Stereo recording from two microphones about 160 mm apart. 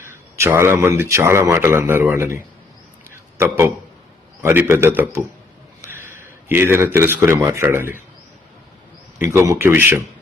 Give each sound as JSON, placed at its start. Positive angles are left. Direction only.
{"t": 0.0, "sound": "a man's voice", "side_deg": -15}
{"t": 9.3, "sound": "a man's voice", "side_deg": -15}